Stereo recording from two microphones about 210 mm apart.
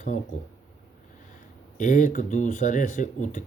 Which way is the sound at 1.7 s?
35° left (ahead or behind).